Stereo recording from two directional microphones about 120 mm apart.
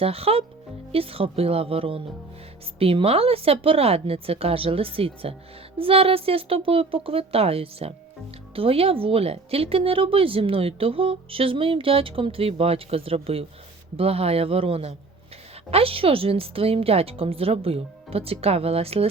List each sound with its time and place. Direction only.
0.0 s a woman's voice: 55° right (ahead or behind)